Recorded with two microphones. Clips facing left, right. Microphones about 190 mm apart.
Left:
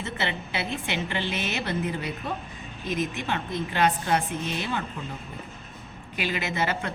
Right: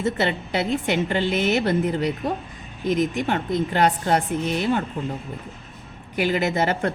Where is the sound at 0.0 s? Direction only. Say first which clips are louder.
Right 8 dB; 45° right (ahead or behind).